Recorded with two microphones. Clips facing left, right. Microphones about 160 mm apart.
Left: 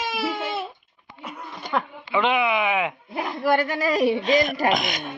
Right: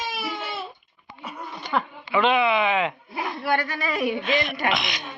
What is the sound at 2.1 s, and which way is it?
Speech, 15° left (ahead or behind).